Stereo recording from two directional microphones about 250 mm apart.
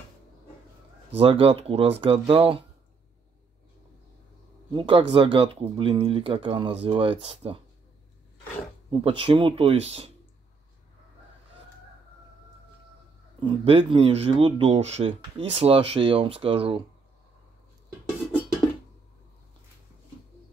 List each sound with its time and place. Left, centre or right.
1.1 s speech: right
4.7 s speech: right
9.0 s speech: right
13.4 s speech: right